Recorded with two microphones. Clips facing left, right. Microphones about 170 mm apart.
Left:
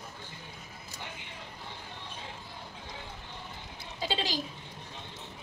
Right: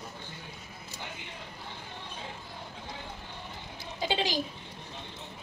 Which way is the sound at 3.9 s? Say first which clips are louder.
Right 3 dB; 15° right (ahead or behind).